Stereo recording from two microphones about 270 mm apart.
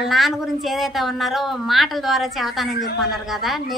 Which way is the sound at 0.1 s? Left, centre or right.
Centre.